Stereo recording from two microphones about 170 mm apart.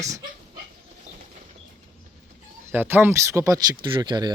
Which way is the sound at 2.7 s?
10° right (ahead or behind).